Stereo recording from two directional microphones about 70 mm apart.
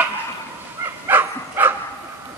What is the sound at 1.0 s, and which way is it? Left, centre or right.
Dog, right.